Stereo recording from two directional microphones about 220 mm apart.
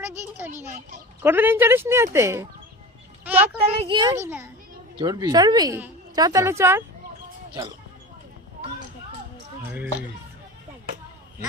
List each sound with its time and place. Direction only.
1.2 s a woman's voice: 10° right (ahead or behind)
3.8 s a woman's voice: 20° right (ahead or behind)